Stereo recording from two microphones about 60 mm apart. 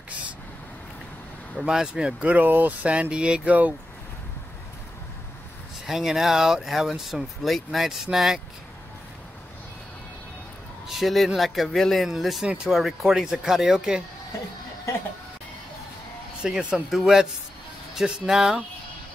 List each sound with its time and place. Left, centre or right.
1.6 s speech: centre
5.9 s speech: centre
10.9 s speech: centre
16.4 s speech: centre